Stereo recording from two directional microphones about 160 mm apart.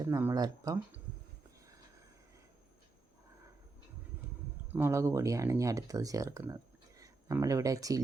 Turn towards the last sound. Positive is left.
turn(degrees=-20)  # may be behind; listen again after turning